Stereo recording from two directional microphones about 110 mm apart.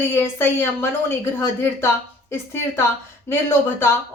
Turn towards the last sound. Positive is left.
turn(degrees=20)  # may be behind; listen again after turning